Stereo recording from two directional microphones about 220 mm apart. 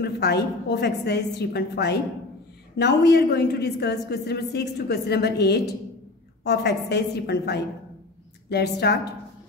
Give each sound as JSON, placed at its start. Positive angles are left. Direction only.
{"t": 0.0, "sound": "a woman's voice", "side_deg": 45}